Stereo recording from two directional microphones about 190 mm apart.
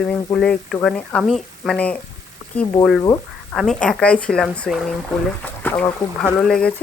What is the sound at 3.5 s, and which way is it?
Speech, 5° left (ahead or behind).